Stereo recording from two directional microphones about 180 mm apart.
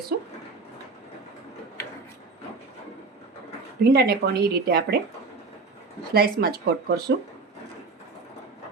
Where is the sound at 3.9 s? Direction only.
60° right (ahead or behind).